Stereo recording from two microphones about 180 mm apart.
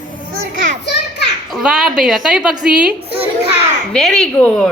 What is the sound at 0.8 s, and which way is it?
Children playing, 70° left (ahead or behind).